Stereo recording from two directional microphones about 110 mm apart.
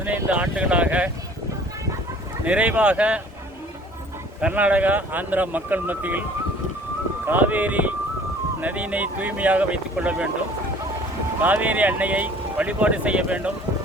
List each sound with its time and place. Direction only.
0.3 s speech: 10° right (ahead or behind)
2.4 s speech: 10° right (ahead or behind)
4.4 s speech: 10° right (ahead or behind)
7.3 s speech: 15° right (ahead or behind)
11.3 s speech: 15° right (ahead or behind)